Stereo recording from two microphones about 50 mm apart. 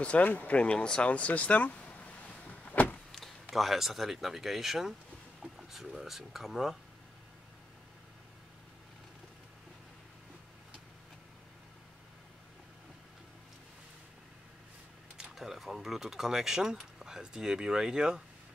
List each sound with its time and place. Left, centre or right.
0.2 s speech: left; by 1.1 s centre
1.1 s vehicle: left
3.1 s speech: centre
15.3 s speech: centre